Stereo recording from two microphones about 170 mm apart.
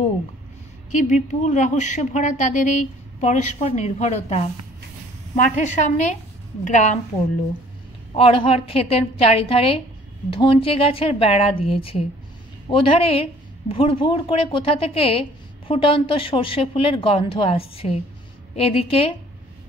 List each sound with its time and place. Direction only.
0.9 s a woman's voice: 45° left (ahead or behind)
8.2 s speech: 30° left (ahead or behind)